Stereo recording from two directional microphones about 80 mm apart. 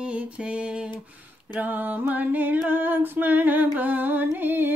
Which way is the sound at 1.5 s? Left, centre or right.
Right.